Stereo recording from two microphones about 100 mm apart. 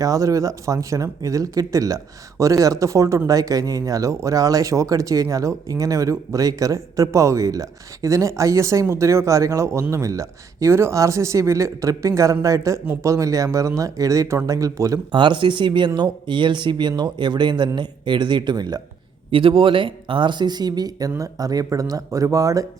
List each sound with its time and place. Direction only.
0.0 s speech: 35° right (ahead or behind)
15.1 s speech: 55° right (ahead or behind)
19.3 s speech: 60° right (ahead or behind); by 22.6 s 35° right (ahead or behind)